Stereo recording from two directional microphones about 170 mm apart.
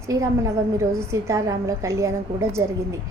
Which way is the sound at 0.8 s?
15° right (ahead or behind).